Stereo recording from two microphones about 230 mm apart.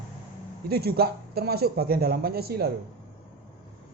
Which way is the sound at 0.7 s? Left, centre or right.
Right.